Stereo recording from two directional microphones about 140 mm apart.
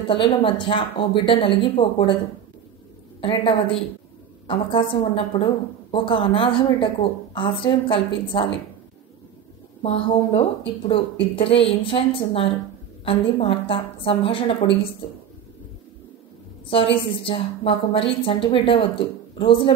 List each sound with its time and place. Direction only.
0.1 s a woman's voice: 35° left (ahead or behind)
3.2 s a woman's voice: 40° left (ahead or behind)
9.8 s a woman's voice: 45° left (ahead or behind)
16.6 s a woman's voice: 40° left (ahead or behind)